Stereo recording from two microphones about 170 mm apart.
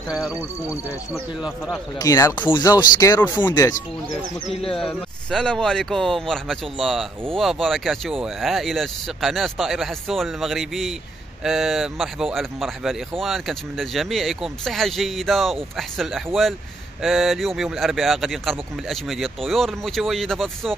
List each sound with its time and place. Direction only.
0.1 s speech: 5° right (ahead or behind)
2.0 s speech: 20° left (ahead or behind)
4.6 s speech: 5° left (ahead or behind)